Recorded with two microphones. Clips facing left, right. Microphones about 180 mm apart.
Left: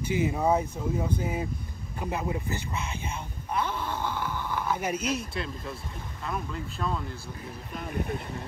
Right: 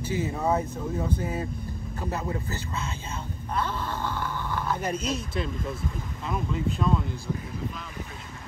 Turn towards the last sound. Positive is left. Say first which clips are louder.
# right 6 dB
turn(degrees=0)  # may be behind; listen again after turning